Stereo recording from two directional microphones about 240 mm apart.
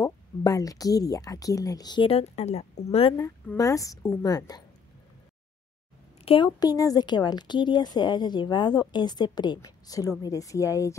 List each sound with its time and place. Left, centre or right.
0.0 s speech: centre
6.2 s speech: left